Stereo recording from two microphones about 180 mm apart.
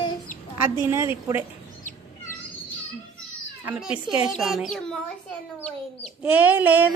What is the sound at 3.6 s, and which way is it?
A child's voice, 5° right (ahead or behind).